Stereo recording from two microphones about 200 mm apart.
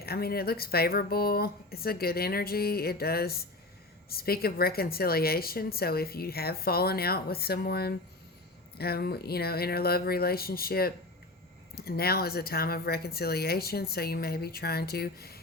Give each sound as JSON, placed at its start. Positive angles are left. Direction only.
{"t": 0.0, "sound": "a woman's voice", "side_deg": 50}